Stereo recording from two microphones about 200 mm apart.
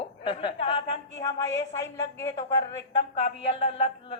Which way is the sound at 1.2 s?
15° left (ahead or behind).